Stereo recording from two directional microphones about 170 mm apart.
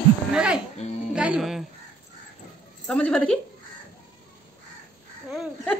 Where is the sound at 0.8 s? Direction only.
40° left (ahead or behind).